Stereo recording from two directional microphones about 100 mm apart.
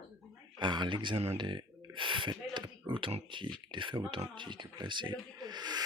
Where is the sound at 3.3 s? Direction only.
55° right (ahead or behind).